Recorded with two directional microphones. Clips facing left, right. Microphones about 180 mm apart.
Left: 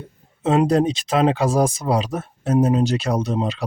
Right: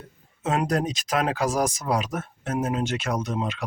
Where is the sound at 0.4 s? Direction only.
30° left (ahead or behind).